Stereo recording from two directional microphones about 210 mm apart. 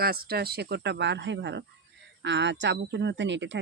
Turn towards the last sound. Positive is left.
turn(degrees=-60)  # may be behind; listen again after turning